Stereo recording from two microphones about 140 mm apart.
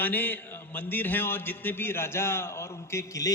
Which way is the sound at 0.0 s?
15° left (ahead or behind).